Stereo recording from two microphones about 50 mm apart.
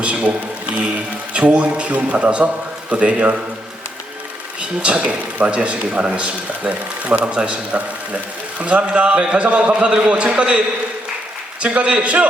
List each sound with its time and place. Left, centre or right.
0.0 s a man's voice: right
4.8 s a man's voice: right
11.6 s a man's voice: right